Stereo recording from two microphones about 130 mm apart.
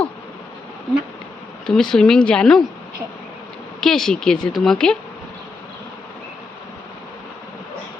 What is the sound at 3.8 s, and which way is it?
Speech, 5° left (ahead or behind).